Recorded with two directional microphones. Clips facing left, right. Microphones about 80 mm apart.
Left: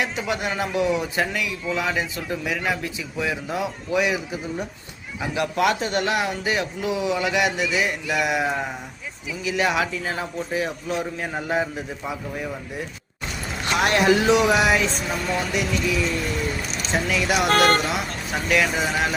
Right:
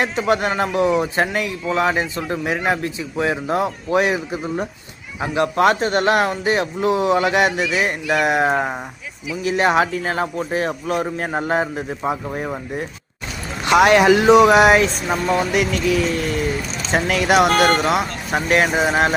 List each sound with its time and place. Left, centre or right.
0.0 s a man's voice: right
13.7 s speech: right
14.3 s speech: right
18.3 s a man's voice: right